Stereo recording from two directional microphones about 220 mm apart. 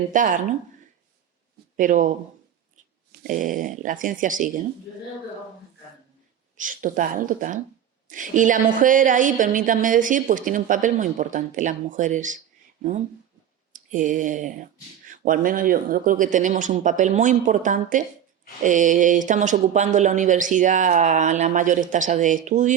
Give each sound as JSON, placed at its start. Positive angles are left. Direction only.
{"t": 0.1, "sound": "a woman's voice", "side_deg": -35}
{"t": 1.7, "sound": "a woman's voice", "side_deg": -35}
{"t": 6.6, "sound": "a woman's voice", "side_deg": -35}
{"t": 13.7, "sound": "a woman's voice", "side_deg": -35}